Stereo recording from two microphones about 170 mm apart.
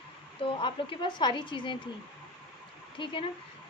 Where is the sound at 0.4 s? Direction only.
30° left (ahead or behind).